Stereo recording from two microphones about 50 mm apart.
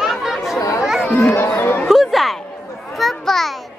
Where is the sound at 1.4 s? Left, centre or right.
Left.